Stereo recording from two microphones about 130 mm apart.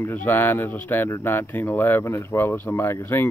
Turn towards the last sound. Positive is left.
turn(degrees=20)  # may be behind; listen again after turning